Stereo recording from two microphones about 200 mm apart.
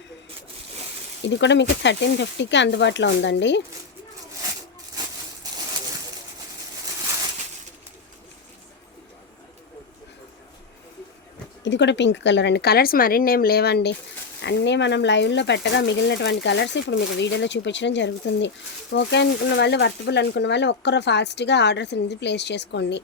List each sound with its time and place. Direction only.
1.3 s speech: 60° left (ahead or behind)
11.6 s speech: 60° left (ahead or behind)